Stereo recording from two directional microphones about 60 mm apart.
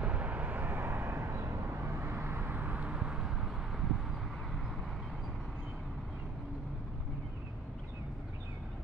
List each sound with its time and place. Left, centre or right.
0.0 s vehicle: right